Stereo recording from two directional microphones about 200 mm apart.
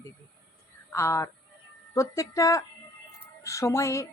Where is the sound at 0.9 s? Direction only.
15° left (ahead or behind).